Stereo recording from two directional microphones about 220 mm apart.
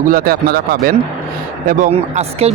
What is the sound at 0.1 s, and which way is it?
Speech, 45° right (ahead or behind).